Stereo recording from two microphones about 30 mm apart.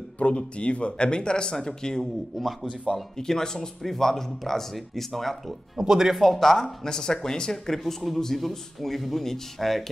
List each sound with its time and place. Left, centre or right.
0.2 s speech: left; by 2.0 s centre
2.3 s speech: centre
3.2 s speech: centre
5.8 s speech: centre
6.1 s speech: centre
6.9 s speech: left
7.7 s speech: centre